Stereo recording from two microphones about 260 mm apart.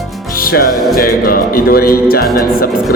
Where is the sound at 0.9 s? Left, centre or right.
Left.